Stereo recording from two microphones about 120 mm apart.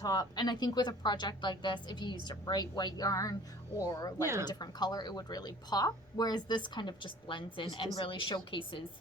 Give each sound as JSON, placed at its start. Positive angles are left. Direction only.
{"t": 0.0, "sound": "a woman's voice", "side_deg": 30}